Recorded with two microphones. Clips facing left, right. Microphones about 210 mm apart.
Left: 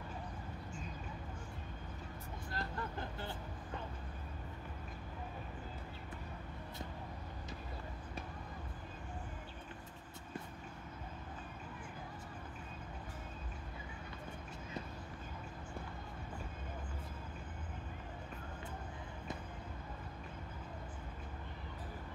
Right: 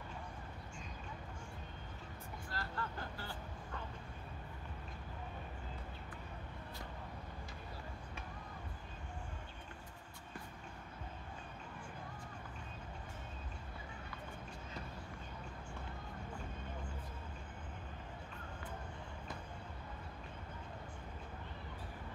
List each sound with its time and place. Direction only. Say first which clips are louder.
2.5 s vehicle: left 2 dB; 20° left (ahead or behind)